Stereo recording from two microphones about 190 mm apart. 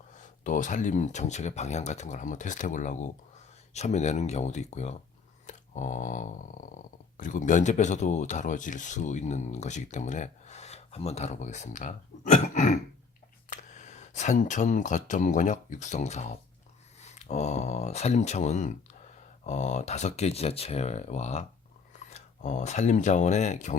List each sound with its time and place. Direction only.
0.1 s speech: 40° left (ahead or behind)
5.5 s a sound: 40° left (ahead or behind)
7.2 s speech: 45° left (ahead or behind)